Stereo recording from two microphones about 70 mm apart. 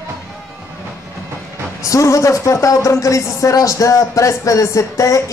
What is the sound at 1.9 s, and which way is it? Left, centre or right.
Speech, left.